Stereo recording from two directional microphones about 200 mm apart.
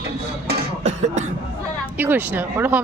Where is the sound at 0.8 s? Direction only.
35° right (ahead or behind).